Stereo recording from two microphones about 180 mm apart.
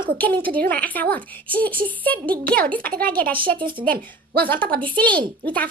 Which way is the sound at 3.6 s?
25° right (ahead or behind).